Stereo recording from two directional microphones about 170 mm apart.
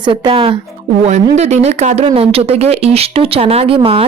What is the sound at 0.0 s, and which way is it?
Speech, 30° right (ahead or behind).